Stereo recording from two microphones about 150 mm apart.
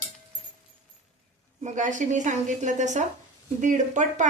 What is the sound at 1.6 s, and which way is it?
A woman's voice, 55° right (ahead or behind).